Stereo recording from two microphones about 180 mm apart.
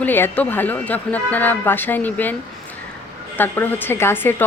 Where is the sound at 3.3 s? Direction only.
10° left (ahead or behind).